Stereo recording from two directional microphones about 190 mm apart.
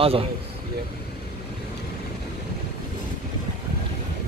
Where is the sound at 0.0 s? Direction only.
30° right (ahead or behind).